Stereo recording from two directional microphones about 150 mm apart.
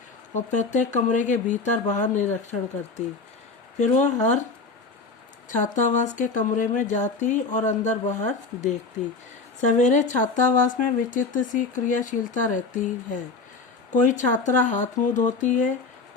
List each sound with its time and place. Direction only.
0.3 s speech: 55° left (ahead or behind)
5.7 s speech: 55° left (ahead or behind)
13.9 s speech: 55° left (ahead or behind)